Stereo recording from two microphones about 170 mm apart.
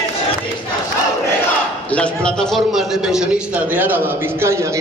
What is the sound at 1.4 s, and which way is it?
A man's voice, 5° left (ahead or behind).